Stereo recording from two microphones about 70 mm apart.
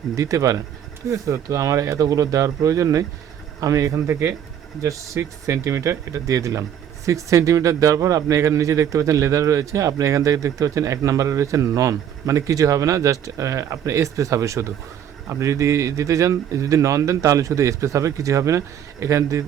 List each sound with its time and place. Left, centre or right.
0.2 s speech: right